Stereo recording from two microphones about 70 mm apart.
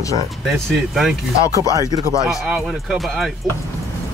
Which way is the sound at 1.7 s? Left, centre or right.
Right.